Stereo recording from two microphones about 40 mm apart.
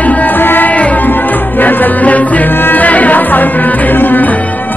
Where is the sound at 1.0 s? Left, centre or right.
Left.